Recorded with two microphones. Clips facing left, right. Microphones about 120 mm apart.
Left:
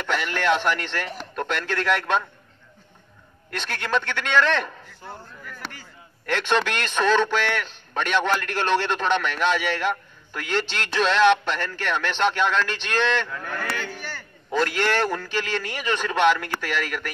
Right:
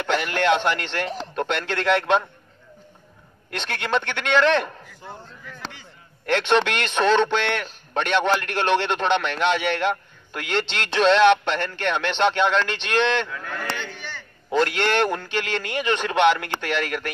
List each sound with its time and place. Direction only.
0.0 s a man's voice: 20° right (ahead or behind)
3.5 s a man's voice: 20° right (ahead or behind)
6.3 s a man's voice: 25° right (ahead or behind)
13.3 s speech: 5° left (ahead or behind)
13.7 s a sound: 5° left (ahead or behind)
14.8 s a man's voice: 20° right (ahead or behind)